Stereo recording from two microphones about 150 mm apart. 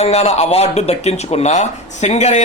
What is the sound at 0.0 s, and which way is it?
Speech, 45° left (ahead or behind).